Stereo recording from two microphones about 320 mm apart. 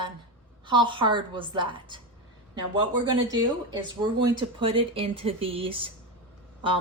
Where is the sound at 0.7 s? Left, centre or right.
Centre.